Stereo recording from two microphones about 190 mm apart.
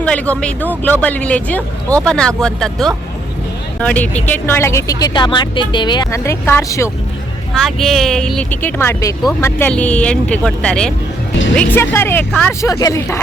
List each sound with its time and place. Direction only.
0.0 s speech: 5° left (ahead or behind)
7.5 s speech: centre (ahead or behind); by 13.1 s 15° left (ahead or behind)